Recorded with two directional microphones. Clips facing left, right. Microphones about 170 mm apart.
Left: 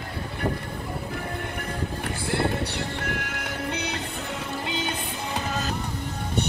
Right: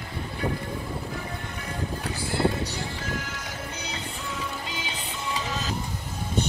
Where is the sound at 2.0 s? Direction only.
60° left (ahead or behind).